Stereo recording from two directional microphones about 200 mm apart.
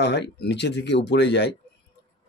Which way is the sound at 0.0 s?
60° left (ahead or behind).